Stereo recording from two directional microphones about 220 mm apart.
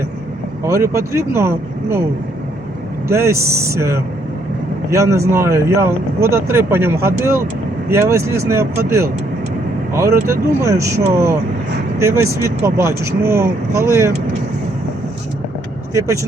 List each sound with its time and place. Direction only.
0.6 s speech: 15° right (ahead or behind)
3.1 s speech: 10° right (ahead or behind)